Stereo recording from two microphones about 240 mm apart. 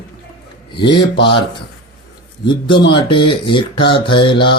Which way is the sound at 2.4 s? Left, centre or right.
Centre.